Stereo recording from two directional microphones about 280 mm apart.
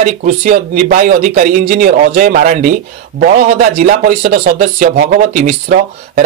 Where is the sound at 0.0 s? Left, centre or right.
Right.